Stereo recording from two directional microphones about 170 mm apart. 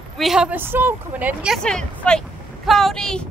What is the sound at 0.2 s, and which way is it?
A woman's voice, 5° right (ahead or behind).